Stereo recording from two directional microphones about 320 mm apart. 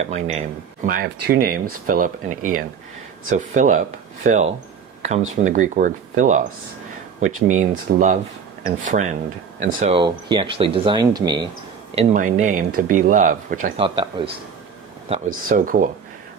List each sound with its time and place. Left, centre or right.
0.0 s speech: centre
11.9 s speech: right